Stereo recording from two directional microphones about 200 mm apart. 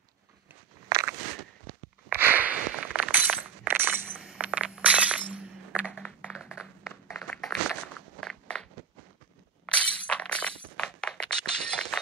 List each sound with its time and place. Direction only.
0.8 s biting: 20° right (ahead or behind)
2.0 s breaking: 10° right (ahead or behind)
5.9 s a sound: 5° left (ahead or behind)
9.7 s breaking: 5° left (ahead or behind)